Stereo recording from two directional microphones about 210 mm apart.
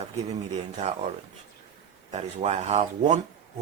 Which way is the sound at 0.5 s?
35° right (ahead or behind).